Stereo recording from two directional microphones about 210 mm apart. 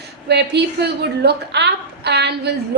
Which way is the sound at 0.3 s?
55° right (ahead or behind).